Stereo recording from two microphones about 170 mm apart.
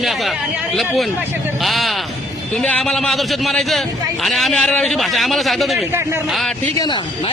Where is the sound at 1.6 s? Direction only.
Centre (ahead or behind).